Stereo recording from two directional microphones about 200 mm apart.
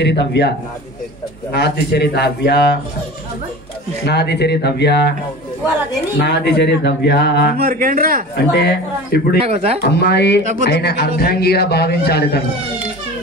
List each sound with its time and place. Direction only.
0.0 s speech: 60° left (ahead or behind)
4.0 s speech: 55° left (ahead or behind)
6.1 s speech: 60° left (ahead or behind)
7.5 s speech: 45° right (ahead or behind)
8.5 s speech: 55° left (ahead or behind)
9.4 s speech: 30° right (ahead or behind)
9.8 s a man's voice: 55° left (ahead or behind)